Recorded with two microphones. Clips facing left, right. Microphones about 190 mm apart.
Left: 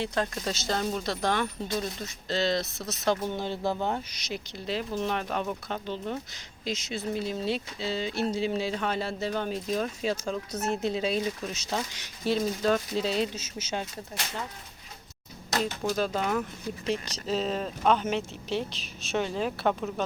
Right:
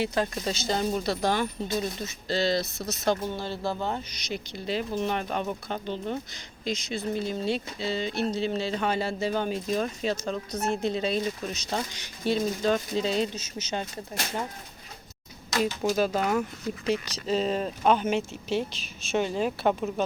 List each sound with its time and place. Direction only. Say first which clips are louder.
0.0 s speech: right 2 dB; 5° right (ahead or behind)
3.3 s speech: left 1 dB; 20° left (ahead or behind)
4.3 s speech: right 2 dB; centre (ahead or behind)
8.8 s speech: right 3 dB; centre (ahead or behind)
15.6 s speech: right 4 dB; 10° right (ahead or behind)